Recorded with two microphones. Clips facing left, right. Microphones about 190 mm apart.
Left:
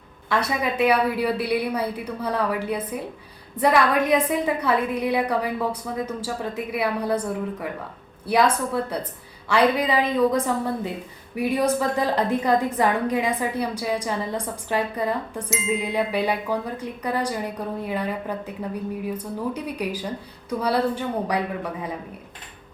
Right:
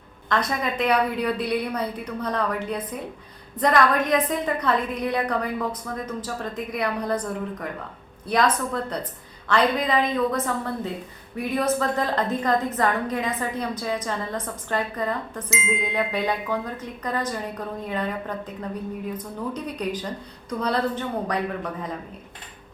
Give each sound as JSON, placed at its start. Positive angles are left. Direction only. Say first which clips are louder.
{"t": 0.3, "sound": "a woman's voice", "louder": "left 1 dB", "side_deg": 10}
{"t": 15.7, "sound": "chime", "louder": "left 3 dB", "side_deg": 35}
{"t": 16.0, "sound": "a woman's voice", "louder": "left 1 dB", "side_deg": 10}